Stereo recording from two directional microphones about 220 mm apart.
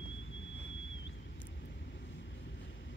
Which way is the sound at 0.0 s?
55° left (ahead or behind).